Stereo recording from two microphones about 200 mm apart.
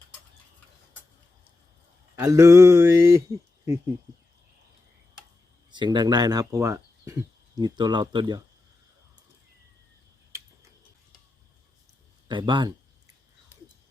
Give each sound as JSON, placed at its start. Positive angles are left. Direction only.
{"t": 2.1, "sound": "a sound", "side_deg": -15}
{"t": 5.7, "sound": "speech", "side_deg": -20}
{"t": 12.3, "sound": "speech", "side_deg": -25}